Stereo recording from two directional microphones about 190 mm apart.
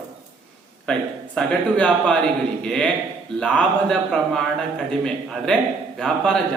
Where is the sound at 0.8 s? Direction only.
5° left (ahead or behind).